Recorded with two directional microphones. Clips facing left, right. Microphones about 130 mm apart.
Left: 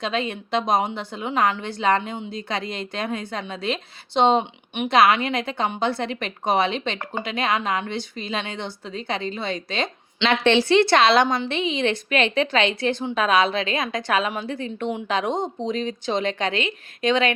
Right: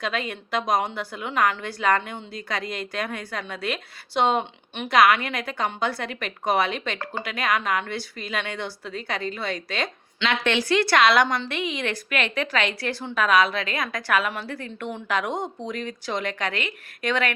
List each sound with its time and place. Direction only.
0.0 s a woman's voice: 25° left (ahead or behind)